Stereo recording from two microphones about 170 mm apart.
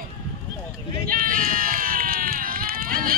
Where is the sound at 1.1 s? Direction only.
60° right (ahead or behind).